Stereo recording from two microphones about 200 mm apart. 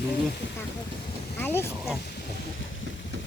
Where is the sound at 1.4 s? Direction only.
10° left (ahead or behind).